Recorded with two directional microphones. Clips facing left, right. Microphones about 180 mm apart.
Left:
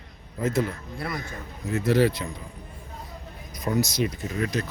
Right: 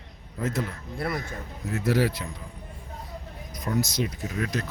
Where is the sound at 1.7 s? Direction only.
5° right (ahead or behind).